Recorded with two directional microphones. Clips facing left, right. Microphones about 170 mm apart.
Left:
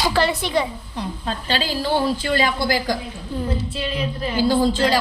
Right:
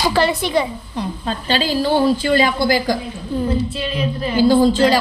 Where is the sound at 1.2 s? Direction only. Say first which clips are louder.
Right 4 dB; 25° right (ahead or behind).